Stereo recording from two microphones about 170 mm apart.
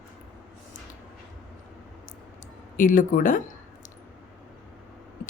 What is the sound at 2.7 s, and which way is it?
Speech, 50° left (ahead or behind).